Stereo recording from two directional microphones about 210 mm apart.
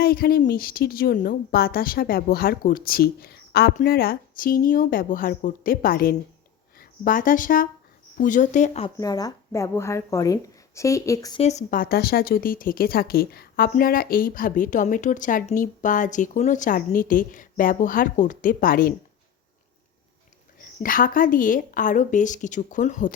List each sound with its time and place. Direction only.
0.0 s a woman's voice: 45° left (ahead or behind)
9.0 s speech: 15° left (ahead or behind)
11.3 s speech: 35° left (ahead or behind)
20.6 s speech: 40° left (ahead or behind)